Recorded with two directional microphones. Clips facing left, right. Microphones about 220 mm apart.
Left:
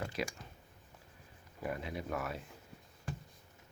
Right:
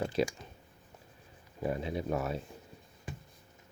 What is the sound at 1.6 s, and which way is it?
Speech, 25° right (ahead or behind).